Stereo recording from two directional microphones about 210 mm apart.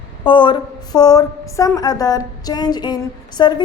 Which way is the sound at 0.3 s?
25° left (ahead or behind).